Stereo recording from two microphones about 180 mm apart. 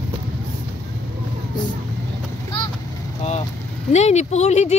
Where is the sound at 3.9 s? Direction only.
40° left (ahead or behind).